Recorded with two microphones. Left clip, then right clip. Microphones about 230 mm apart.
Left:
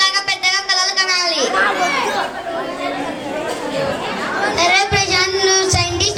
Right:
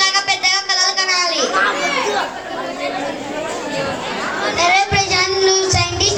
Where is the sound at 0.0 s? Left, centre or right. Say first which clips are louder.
Even; left.